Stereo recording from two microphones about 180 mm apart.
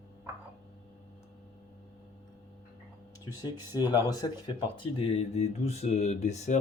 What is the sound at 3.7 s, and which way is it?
Speech, 20° left (ahead or behind).